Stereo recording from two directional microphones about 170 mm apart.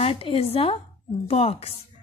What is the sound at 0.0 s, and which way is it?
A woman's voice, 35° left (ahead or behind).